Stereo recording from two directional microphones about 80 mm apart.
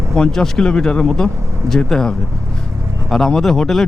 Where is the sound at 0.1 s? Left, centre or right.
Centre.